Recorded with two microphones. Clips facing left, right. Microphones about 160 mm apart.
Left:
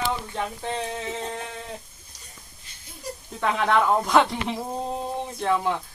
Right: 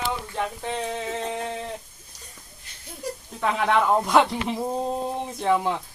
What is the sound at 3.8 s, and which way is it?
Speech, 5° right (ahead or behind).